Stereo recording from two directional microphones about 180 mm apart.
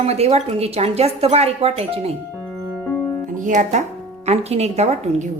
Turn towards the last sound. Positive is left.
turn(degrees=-35)  # may be behind; listen again after turning